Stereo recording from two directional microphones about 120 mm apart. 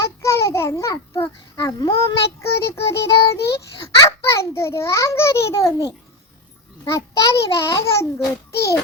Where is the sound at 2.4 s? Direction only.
20° left (ahead or behind).